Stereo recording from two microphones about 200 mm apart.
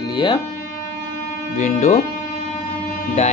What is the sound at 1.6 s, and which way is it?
Speech, 35° left (ahead or behind).